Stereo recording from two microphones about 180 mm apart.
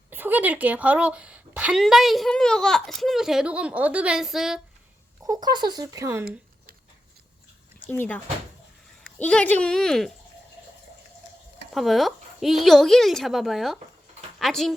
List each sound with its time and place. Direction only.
0.1 s speech: 10° right (ahead or behind)
5.2 s speech: 20° right (ahead or behind)
7.9 s speech: 10° left (ahead or behind)
11.7 s speech: centre (ahead or behind)